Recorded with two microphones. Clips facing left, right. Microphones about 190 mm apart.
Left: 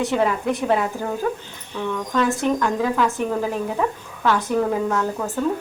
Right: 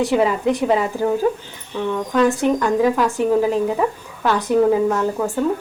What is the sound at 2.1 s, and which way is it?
Speech, 15° right (ahead or behind).